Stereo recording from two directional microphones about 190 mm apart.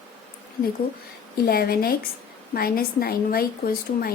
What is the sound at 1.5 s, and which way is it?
A woman's voice, 50° left (ahead or behind).